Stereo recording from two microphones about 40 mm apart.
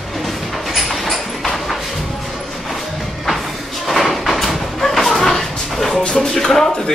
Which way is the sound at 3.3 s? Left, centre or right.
Centre.